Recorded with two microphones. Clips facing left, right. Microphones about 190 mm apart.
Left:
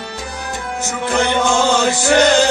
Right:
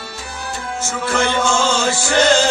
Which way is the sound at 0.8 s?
15° left (ahead or behind).